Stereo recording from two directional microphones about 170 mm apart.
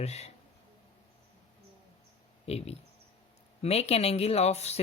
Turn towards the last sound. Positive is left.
turn(degrees=40)  # may be behind; listen again after turning